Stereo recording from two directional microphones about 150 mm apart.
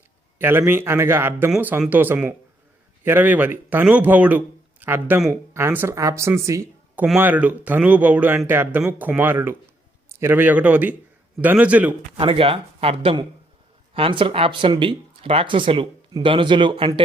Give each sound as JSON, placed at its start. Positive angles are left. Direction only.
{"t": 0.3, "sound": "speech", "side_deg": -15}
{"t": 1.5, "sound": "speech", "side_deg": -5}
{"t": 12.1, "sound": "speech", "side_deg": -35}